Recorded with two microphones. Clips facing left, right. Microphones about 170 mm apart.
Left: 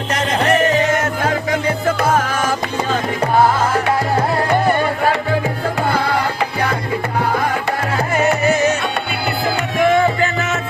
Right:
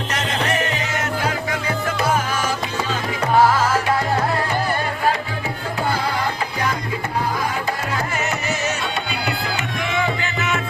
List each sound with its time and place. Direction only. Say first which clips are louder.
2.0 s music: left 4 dB; 55° left (ahead or behind)
9.7 s music: left 11 dB; 50° left (ahead or behind)